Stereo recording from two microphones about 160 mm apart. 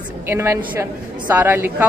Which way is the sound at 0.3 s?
15° right (ahead or behind).